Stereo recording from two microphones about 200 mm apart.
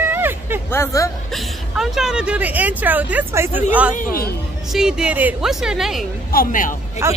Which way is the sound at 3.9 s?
45° left (ahead or behind).